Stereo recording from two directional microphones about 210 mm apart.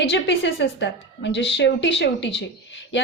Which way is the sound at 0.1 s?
60° left (ahead or behind).